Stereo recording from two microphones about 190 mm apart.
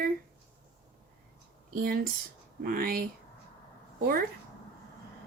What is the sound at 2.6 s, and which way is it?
Speech, 50° right (ahead or behind).